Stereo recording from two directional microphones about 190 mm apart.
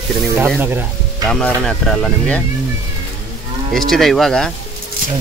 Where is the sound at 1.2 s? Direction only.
5° left (ahead or behind).